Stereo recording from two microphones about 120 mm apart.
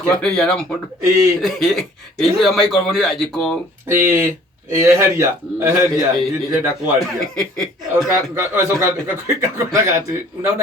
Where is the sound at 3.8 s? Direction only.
20° right (ahead or behind).